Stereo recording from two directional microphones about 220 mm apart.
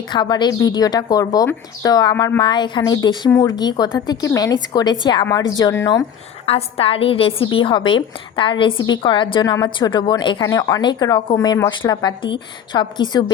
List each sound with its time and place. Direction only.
0.1 s speech: 20° left (ahead or behind)
6.4 s a woman's voice: 25° left (ahead or behind)